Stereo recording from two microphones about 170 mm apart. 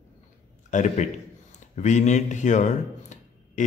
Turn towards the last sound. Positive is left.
turn(degrees=45)  # may be behind; listen again after turning